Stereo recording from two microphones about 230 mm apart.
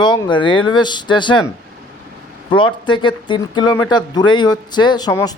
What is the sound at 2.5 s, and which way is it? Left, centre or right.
Speech, left.